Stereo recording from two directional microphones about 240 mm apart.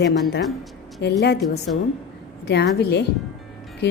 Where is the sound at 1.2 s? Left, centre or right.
Left.